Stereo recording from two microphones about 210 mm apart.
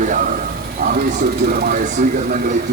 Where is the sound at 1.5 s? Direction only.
45° right (ahead or behind).